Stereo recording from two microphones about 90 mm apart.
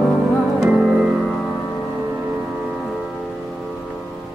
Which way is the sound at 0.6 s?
5° right (ahead or behind).